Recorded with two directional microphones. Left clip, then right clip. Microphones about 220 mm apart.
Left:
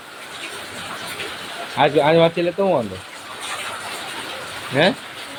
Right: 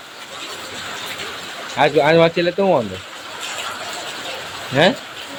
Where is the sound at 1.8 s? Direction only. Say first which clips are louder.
Right 1 dB; 5° right (ahead or behind).